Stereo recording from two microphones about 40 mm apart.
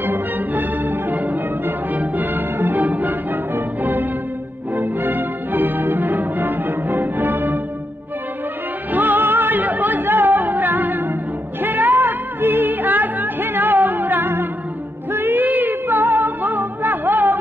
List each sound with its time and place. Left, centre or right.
0.0 s music: right
8.9 s music: right
15.4 s music: right